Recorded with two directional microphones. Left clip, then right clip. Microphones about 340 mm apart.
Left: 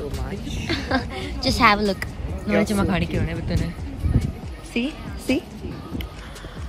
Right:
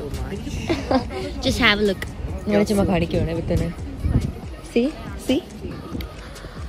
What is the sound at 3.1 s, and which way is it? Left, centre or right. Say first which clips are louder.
Speech: right 4 dB; left.